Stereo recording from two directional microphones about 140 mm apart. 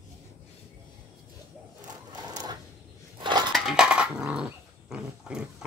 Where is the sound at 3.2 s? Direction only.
30° right (ahead or behind).